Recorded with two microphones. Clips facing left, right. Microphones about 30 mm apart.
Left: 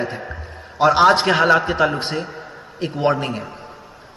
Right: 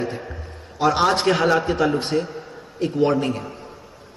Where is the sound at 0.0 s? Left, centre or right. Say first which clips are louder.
Left 2 dB; left.